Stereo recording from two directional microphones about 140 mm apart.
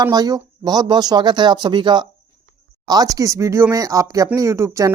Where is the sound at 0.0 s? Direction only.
25° right (ahead or behind).